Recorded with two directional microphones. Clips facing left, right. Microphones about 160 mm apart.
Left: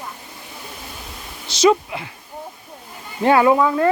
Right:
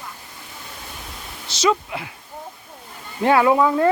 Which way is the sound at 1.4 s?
15° left (ahead or behind).